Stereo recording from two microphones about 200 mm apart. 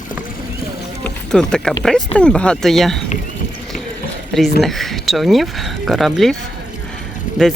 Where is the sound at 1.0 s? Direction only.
5° left (ahead or behind).